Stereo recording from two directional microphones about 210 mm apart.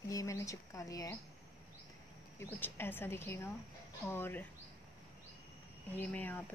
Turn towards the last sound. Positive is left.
turn(degrees=10)  # may be behind; listen again after turning